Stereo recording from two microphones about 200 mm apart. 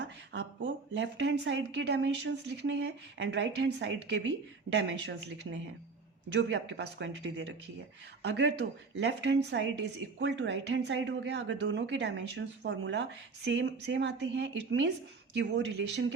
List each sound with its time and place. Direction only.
0.0 s speech: 60° right (ahead or behind)